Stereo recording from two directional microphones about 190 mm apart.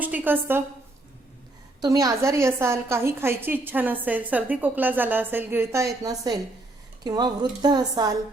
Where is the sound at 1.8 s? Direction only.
20° right (ahead or behind).